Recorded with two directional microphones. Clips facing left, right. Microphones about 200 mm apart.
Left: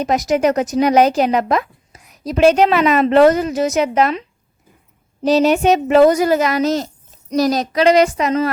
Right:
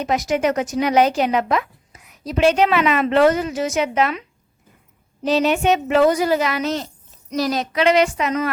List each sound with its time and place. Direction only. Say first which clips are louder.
0.0 s speech: left 4 dB; 40° left (ahead or behind)
5.2 s speech: left 4 dB; 40° left (ahead or behind)